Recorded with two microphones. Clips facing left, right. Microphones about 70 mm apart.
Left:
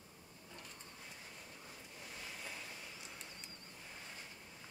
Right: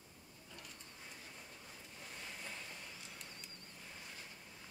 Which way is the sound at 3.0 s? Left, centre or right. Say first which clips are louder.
Left 1 dB; centre.